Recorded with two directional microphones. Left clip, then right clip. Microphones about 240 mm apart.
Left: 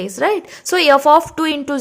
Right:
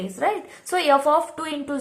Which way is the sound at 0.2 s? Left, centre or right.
Left.